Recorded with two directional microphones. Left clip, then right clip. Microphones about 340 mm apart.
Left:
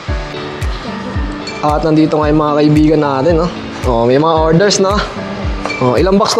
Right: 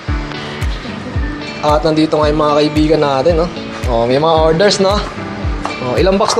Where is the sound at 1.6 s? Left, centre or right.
Left.